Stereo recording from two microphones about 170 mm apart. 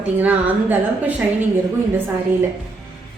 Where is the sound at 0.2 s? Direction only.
10° right (ahead or behind).